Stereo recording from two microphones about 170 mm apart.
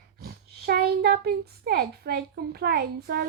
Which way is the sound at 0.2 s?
65° right (ahead or behind).